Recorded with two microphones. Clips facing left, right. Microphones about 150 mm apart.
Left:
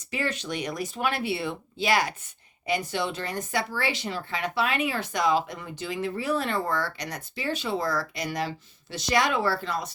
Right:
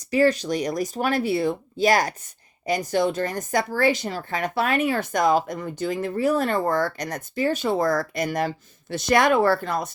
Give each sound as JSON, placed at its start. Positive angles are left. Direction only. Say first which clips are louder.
{"t": 0.1, "sound": "speech", "louder": "right 11 dB", "side_deg": -40}